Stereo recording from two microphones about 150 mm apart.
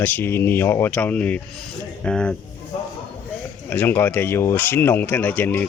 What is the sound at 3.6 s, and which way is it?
Speech, 15° left (ahead or behind).